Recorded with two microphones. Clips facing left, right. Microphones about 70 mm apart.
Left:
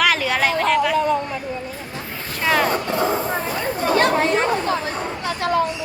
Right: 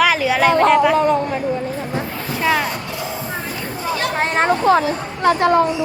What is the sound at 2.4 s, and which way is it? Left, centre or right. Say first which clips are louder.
Vehicle: right 1 dB; centre.